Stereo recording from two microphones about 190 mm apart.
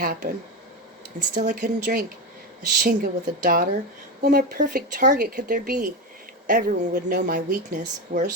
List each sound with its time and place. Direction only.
0.0 s speech: 50° right (ahead or behind)
1.3 s speech: 50° right (ahead or behind)